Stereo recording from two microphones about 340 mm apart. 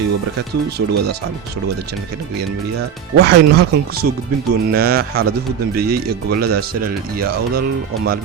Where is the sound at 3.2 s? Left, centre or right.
Right.